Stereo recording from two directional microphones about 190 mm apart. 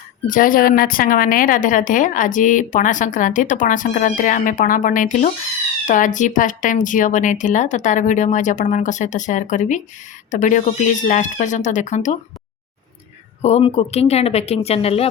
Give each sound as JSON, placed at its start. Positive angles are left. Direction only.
{"t": 0.3, "sound": "a woman's voice", "side_deg": 45}
{"t": 13.4, "sound": "speech", "side_deg": 30}